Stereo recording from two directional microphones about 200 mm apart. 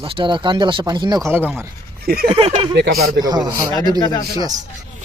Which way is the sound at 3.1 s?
20° right (ahead or behind).